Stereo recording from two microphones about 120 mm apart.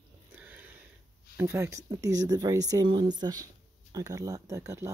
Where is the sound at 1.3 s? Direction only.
25° right (ahead or behind).